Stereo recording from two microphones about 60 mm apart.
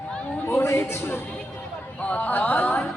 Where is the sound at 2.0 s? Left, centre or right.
Left.